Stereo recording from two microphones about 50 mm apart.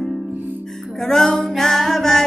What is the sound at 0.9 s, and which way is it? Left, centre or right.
Speech, centre.